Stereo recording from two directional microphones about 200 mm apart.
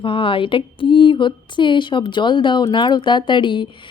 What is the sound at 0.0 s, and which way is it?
A woman's voice, 25° left (ahead or behind).